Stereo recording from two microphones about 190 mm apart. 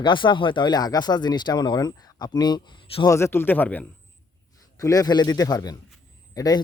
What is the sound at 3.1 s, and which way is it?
Speech, 10° left (ahead or behind).